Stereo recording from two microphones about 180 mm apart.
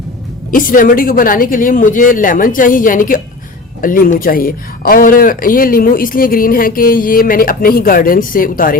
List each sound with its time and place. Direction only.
0.5 s speech: 50° left (ahead or behind)